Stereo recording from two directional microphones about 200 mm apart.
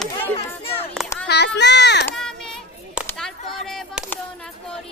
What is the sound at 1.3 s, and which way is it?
Speech, 60° left (ahead or behind).